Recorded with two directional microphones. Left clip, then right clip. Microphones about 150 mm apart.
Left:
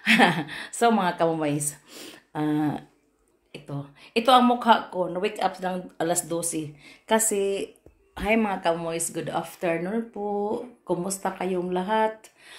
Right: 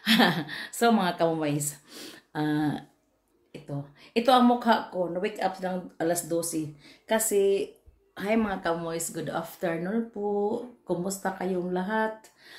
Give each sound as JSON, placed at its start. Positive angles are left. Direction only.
{"t": 0.0, "sound": "speech", "side_deg": -5}
{"t": 3.7, "sound": "speech", "side_deg": -5}
{"t": 4.5, "sound": "speech", "side_deg": -15}